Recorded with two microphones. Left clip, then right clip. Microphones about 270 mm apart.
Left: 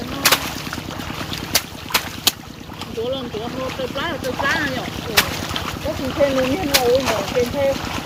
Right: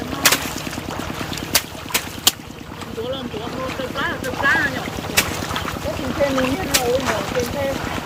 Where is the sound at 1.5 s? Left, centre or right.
Centre.